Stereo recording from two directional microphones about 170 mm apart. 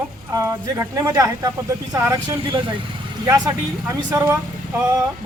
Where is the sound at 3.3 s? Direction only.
20° right (ahead or behind).